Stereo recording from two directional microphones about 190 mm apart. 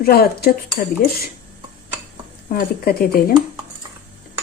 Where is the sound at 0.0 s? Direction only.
55° left (ahead or behind).